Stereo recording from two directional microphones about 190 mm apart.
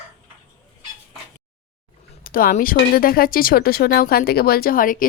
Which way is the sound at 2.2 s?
45° left (ahead or behind).